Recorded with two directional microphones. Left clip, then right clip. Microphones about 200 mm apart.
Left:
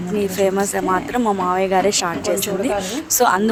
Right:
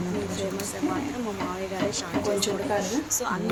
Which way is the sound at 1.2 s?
50° left (ahead or behind).